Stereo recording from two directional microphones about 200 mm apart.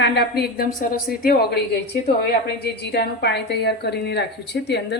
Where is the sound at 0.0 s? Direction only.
55° left (ahead or behind).